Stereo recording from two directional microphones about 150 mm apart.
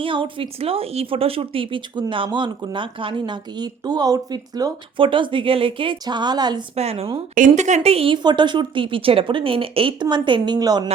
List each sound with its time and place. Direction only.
0.0 s speech: 35° right (ahead or behind)
6.7 s speech: 45° right (ahead or behind)
7.3 s speech: 55° right (ahead or behind); by 10.8 s 25° right (ahead or behind)